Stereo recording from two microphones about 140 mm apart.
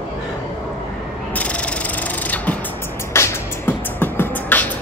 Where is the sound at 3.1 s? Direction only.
15° left (ahead or behind).